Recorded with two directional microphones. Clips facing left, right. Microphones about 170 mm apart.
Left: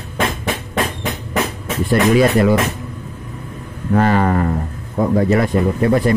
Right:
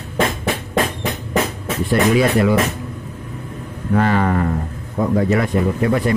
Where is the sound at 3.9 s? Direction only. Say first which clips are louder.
Left 2 dB; 40° left (ahead or behind).